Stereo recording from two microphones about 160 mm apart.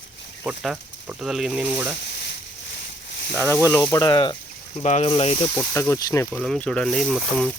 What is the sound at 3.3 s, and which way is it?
Speech, 15° left (ahead or behind).